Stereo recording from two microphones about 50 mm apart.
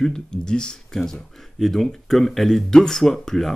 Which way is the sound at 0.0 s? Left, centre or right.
Centre.